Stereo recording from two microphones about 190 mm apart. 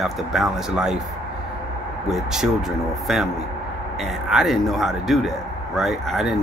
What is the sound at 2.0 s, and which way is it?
Speech, centre (ahead or behind).